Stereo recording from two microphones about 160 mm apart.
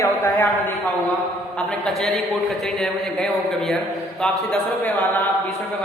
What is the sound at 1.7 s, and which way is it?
A man's voice, 5° left (ahead or behind).